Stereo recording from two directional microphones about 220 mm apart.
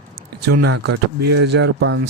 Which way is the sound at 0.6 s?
50° right (ahead or behind).